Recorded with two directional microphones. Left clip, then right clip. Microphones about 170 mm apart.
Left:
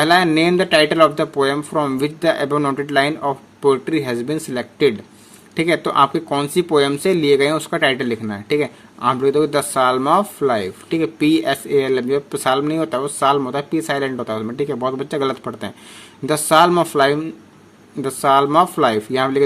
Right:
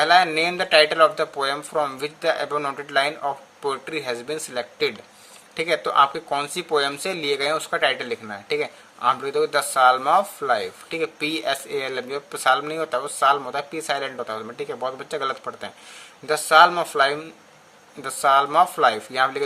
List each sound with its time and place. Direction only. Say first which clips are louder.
0.0 s speech: left 3 dB; 25° left (ahead or behind)